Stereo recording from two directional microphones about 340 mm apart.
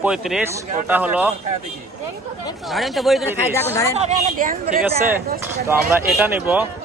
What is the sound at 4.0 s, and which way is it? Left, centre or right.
Speech, centre.